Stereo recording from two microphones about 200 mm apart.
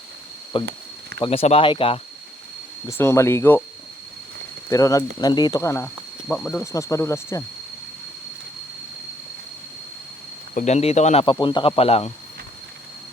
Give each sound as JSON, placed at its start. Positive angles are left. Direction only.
{"t": 0.5, "sound": "speech", "side_deg": 25}
{"t": 2.8, "sound": "speech", "side_deg": 15}
{"t": 4.7, "sound": "speech", "side_deg": 15}
{"t": 10.5, "sound": "speech", "side_deg": 35}